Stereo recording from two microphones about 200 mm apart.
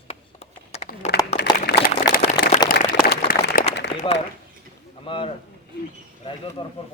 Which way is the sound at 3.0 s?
50° left (ahead or behind).